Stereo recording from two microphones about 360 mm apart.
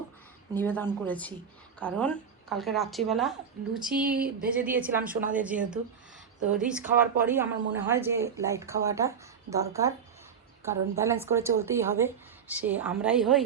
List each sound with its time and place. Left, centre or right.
0.5 s speech: centre
3.9 s speech: right
4.6 s a woman's voice: centre